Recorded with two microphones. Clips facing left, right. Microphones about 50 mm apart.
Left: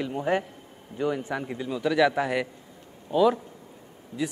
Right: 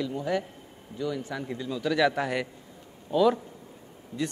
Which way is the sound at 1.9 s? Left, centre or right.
Centre.